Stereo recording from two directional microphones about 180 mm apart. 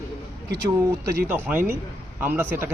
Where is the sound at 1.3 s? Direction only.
10° right (ahead or behind).